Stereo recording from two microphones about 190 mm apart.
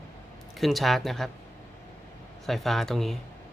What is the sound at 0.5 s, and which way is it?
Speech, centre (ahead or behind).